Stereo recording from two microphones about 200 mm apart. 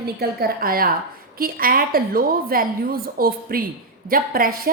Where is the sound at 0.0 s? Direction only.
50° right (ahead or behind).